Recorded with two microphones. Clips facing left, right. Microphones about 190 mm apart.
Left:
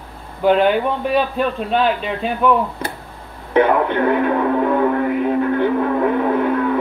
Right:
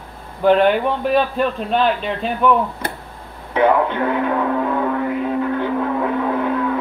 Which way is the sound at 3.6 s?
60° left (ahead or behind).